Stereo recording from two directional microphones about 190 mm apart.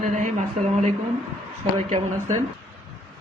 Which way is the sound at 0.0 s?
40° right (ahead or behind).